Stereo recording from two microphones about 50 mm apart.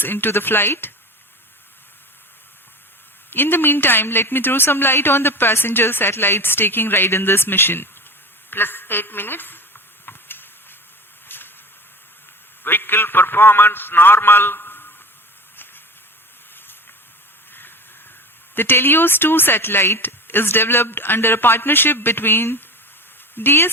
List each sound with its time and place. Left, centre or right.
0.0 s a woman's voice: left
3.2 s a woman's voice: left
8.4 s a sound: left
12.6 s a woman's voice: left
17.5 s a sound: left
18.5 s a woman's voice: left